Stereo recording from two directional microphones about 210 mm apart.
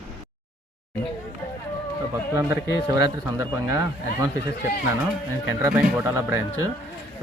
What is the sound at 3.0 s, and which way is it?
A man's voice, 15° right (ahead or behind).